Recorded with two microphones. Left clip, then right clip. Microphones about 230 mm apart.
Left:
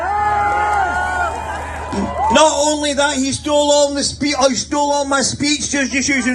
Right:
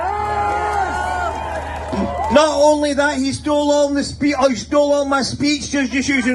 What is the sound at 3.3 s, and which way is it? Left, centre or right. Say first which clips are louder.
Speech: left 2 dB; left.